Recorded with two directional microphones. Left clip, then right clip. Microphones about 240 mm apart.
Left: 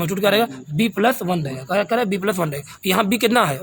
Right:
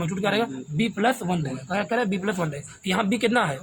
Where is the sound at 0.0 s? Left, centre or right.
Left.